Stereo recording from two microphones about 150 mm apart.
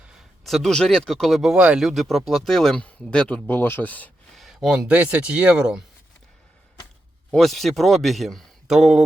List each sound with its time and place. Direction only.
0.1 s speech: centre (ahead or behind)
4.4 s speech: 5° right (ahead or behind)
7.3 s speech: centre (ahead or behind)